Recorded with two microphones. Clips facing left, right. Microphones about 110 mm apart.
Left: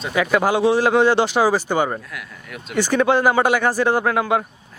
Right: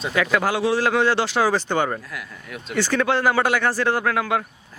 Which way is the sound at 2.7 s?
15° left (ahead or behind).